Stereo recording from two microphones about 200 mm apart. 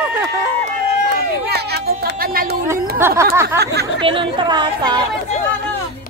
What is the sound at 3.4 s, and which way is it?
Speech, 55° right (ahead or behind).